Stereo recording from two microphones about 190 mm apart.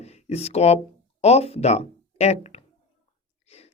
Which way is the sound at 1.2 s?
35° left (ahead or behind).